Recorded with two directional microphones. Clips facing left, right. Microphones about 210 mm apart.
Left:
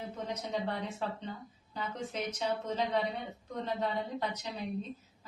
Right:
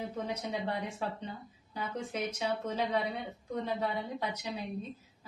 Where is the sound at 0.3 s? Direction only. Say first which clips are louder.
Left 3 dB; 10° right (ahead or behind).